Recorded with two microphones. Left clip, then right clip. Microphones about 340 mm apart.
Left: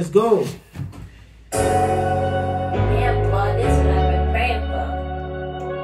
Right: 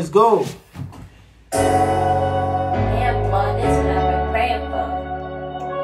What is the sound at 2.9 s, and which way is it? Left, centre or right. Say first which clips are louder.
Music: even; right.